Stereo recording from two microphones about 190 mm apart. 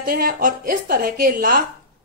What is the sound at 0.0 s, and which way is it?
A woman's voice, 50° right (ahead or behind).